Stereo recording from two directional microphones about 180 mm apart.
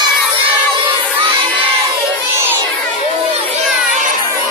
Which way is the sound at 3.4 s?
35° right (ahead or behind).